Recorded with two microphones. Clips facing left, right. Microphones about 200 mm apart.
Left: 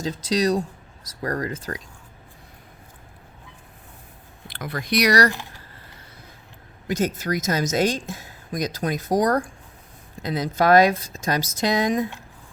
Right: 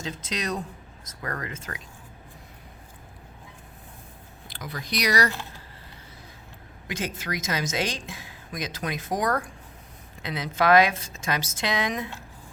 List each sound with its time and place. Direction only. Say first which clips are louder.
0.0 s a woman's voice: left 10 dB; 35° left (ahead or behind)
4.4 s speech: left 7 dB; 60° left (ahead or behind); by 5.3 s 75° left (ahead or behind)
6.8 s a woman's voice: left 8 dB; 40° left (ahead or behind)